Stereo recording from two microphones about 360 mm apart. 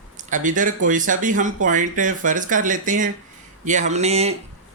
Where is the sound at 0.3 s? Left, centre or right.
Right.